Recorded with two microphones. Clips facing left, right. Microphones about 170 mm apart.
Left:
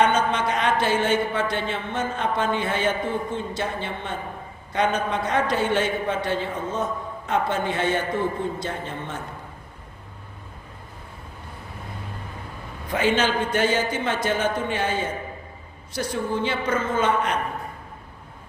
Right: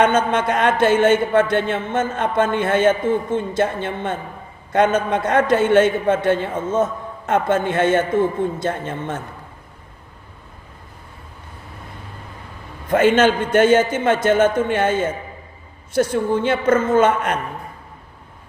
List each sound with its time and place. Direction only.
0.0 s speech: 50° right (ahead or behind)
12.9 s speech: 50° right (ahead or behind)